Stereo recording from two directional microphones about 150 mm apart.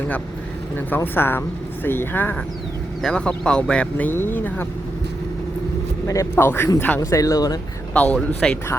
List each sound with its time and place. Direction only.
0.9 s speech: 15° left (ahead or behind)
6.1 s speech: 20° left (ahead or behind)
7.9 s speech: 10° left (ahead or behind)